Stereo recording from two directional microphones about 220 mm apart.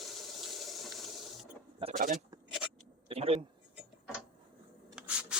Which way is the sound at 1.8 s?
35° right (ahead or behind).